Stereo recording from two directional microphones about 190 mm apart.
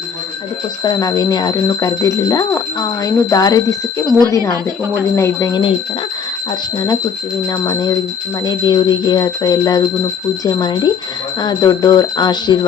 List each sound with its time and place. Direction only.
0.9 s speech: 20° left (ahead or behind)
5.1 s speech: 15° left (ahead or behind)
6.7 s speech: 20° left (ahead or behind)